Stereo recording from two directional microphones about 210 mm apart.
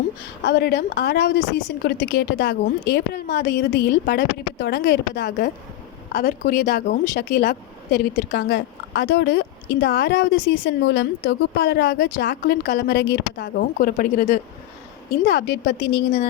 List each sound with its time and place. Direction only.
0.4 s a woman's voice: 50° left (ahead or behind)
15.2 s a woman's voice: 50° left (ahead or behind)